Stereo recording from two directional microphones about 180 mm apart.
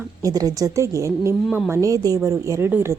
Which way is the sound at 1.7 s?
20° right (ahead or behind).